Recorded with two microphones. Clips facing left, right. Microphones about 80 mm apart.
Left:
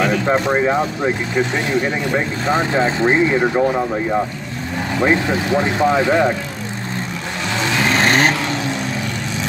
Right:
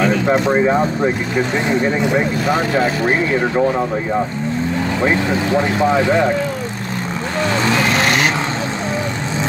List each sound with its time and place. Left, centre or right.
0.0 s speech: centre
2.4 s speech: left
3.5 s speech: centre
5.0 s speech: left
7.9 s vehicle: left